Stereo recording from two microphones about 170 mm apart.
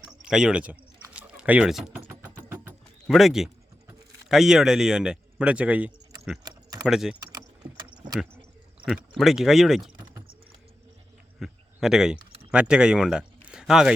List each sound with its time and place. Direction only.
0.0 s typing: 5° right (ahead or behind)
3.1 s speech: centre (ahead or behind)
6.4 s a sound: 20° right (ahead or behind)
6.8 s speech: 5° right (ahead or behind)
8.9 s speech: centre (ahead or behind)
11.3 s a sound: centre (ahead or behind)
12.5 s speech: 5° right (ahead or behind)